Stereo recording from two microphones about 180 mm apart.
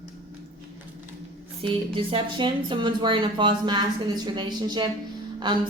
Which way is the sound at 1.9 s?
30° right (ahead or behind).